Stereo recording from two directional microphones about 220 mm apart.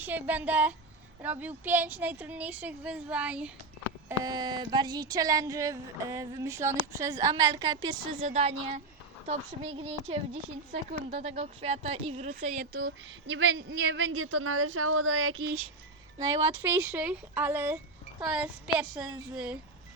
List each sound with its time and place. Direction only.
0.0 s speech: 10° right (ahead or behind)
4.2 s speech: 20° right (ahead or behind); by 12.9 s 40° right (ahead or behind)
13.3 s a woman's voice: 55° right (ahead or behind)
16.6 s speech: 10° right (ahead or behind)